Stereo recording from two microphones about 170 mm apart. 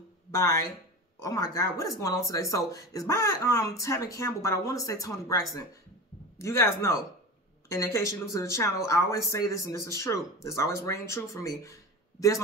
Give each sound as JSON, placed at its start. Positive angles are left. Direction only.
{"t": 0.3, "sound": "speech", "side_deg": 15}